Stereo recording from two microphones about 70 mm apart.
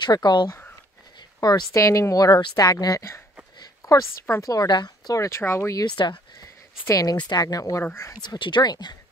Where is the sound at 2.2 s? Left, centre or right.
Left.